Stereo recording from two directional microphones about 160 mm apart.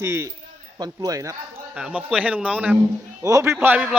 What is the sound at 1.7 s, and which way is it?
A man's voice, 5° right (ahead or behind).